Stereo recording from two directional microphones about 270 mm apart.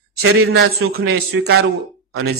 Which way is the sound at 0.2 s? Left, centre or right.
Right.